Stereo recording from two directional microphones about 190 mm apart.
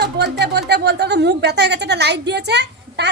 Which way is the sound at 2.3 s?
65° right (ahead or behind).